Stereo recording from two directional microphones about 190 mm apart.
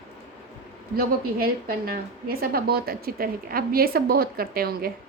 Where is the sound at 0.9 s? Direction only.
50° right (ahead or behind).